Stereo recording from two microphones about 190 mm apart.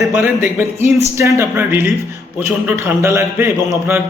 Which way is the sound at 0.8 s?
15° right (ahead or behind).